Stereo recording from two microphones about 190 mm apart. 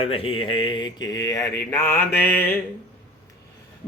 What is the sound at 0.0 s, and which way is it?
Speech, 30° left (ahead or behind).